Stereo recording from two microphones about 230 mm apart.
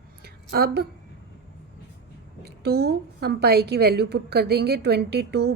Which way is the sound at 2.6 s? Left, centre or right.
Right.